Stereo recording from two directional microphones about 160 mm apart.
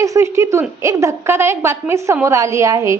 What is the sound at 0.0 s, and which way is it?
A woman's voice, 20° right (ahead or behind).